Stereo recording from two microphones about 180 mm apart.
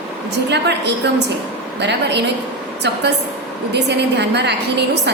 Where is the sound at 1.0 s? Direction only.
70° right (ahead or behind).